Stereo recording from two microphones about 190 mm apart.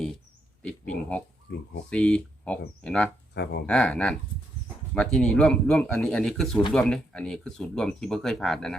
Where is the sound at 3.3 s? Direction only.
65° left (ahead or behind).